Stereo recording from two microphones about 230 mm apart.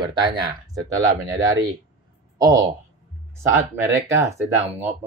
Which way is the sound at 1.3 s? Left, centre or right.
Centre.